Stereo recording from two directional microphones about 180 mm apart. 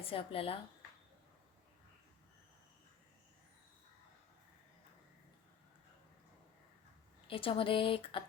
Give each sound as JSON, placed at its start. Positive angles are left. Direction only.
{"t": 0.0, "sound": "speech", "side_deg": 30}
{"t": 7.3, "sound": "speech", "side_deg": 30}